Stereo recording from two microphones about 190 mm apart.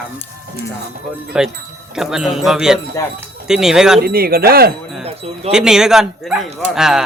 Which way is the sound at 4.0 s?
55° right (ahead or behind).